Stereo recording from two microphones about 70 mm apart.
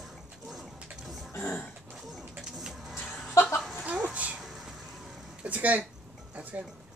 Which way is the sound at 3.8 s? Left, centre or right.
Centre.